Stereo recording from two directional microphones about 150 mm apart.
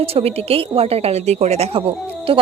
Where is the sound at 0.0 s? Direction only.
40° right (ahead or behind).